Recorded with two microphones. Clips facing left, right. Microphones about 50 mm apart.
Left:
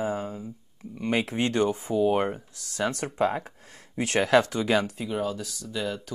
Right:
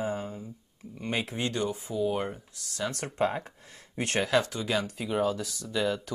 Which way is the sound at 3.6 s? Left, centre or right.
Left.